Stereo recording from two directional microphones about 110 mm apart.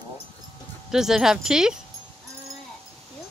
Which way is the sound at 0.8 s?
5° right (ahead or behind).